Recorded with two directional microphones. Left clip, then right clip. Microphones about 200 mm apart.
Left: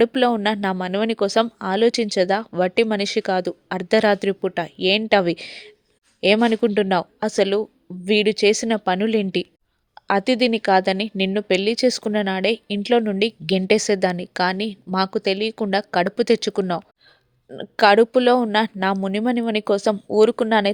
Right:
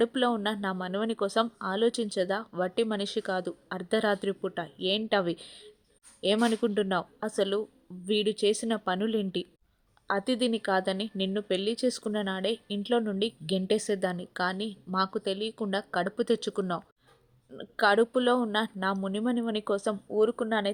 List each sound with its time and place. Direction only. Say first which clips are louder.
0.0 s speech: left 9 dB; 30° left (ahead or behind)